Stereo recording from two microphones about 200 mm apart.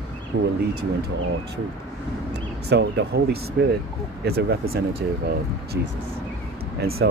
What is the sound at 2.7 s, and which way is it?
Speech, 55° right (ahead or behind).